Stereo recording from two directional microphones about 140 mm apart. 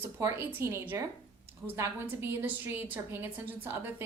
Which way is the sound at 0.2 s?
20° right (ahead or behind).